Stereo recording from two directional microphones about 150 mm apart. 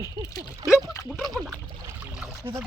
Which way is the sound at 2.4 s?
15° right (ahead or behind).